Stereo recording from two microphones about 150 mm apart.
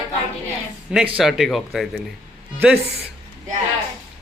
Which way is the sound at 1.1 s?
5° right (ahead or behind).